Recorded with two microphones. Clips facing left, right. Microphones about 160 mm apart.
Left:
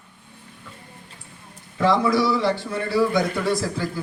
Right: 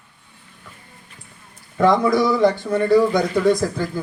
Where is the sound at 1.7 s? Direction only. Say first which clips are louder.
Right 3 dB; 50° right (ahead or behind).